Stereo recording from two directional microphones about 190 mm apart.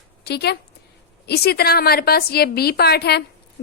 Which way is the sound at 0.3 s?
60° left (ahead or behind).